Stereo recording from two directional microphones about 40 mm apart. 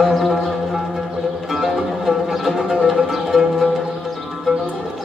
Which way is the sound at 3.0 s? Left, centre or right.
Centre.